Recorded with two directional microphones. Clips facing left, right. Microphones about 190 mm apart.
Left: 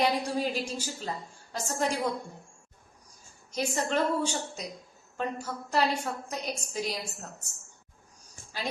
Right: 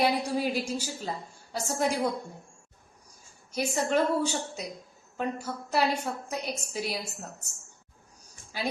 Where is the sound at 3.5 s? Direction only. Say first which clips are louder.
Right 2 dB; 10° right (ahead or behind).